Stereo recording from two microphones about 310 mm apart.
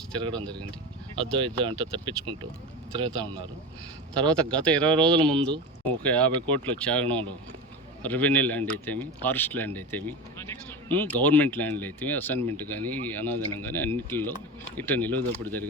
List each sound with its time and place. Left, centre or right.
0.3 s speech: centre
1.2 s speech: centre
4.2 s speech: centre